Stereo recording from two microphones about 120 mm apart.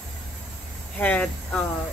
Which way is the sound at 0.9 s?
10° left (ahead or behind).